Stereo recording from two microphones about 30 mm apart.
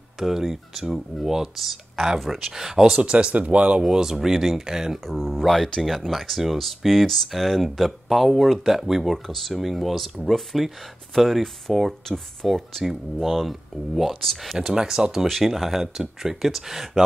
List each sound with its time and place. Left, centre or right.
0.2 s speech: centre
3.0 s speech: right
3.8 s speech: right
5.0 s speech: centre
6.9 s speech: centre
9.0 s speech: centre
14.6 s speech: centre
15.2 s speech: centre